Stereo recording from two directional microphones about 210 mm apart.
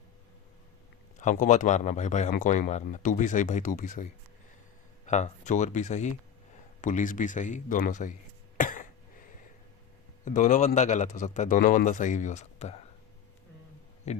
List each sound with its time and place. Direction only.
1.2 s speech: 35° left (ahead or behind)
8.5 s throat clearing: 40° left (ahead or behind)
10.2 s speech: 35° left (ahead or behind)
14.1 s speech: 30° left (ahead or behind)